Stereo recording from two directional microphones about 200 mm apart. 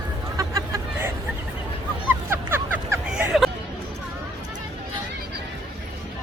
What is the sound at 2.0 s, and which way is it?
Hubbub, 10° right (ahead or behind).